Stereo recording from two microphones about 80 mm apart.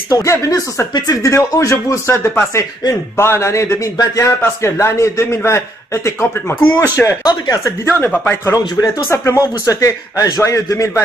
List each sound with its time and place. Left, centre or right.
0.1 s a man's voice: left
6.6 s speech: left
7.2 s speech: left
7.8 s speech: left
8.5 s a man's voice: left